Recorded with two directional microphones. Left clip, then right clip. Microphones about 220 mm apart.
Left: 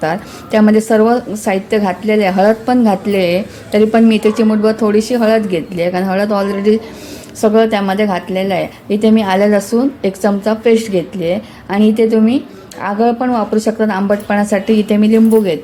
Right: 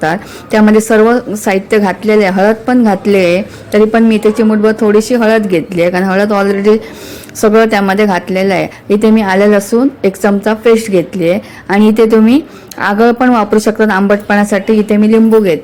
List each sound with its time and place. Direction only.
0.0 s a woman's voice: 15° right (ahead or behind)